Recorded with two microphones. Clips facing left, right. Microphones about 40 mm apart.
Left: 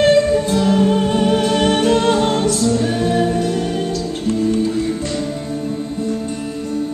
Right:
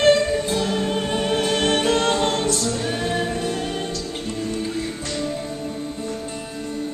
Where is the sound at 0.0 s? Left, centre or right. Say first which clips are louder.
Left 4 dB; centre.